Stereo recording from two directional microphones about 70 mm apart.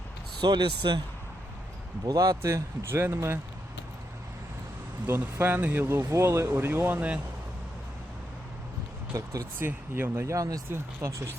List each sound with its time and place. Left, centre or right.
0.4 s speech: right
2.0 s speech: right
5.0 s speech: right
6.1 s speech: right
9.1 s speech: right
9.6 s speech: right
10.3 s speech: right
11.0 s speech: right